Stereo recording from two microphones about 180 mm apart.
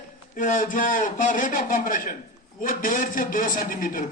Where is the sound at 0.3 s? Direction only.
45° left (ahead or behind).